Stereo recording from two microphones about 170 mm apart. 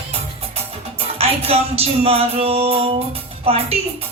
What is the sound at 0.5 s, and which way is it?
Music, 35° right (ahead or behind).